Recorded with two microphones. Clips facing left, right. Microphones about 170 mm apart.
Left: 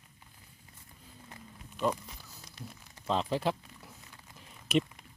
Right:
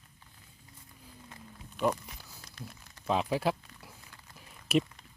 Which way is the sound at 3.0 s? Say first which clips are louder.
Right 1 dB; 10° right (ahead or behind).